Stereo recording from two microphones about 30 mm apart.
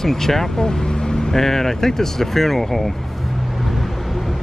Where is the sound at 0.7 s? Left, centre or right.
Left.